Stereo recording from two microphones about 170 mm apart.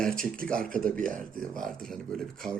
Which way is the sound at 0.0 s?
5° left (ahead or behind).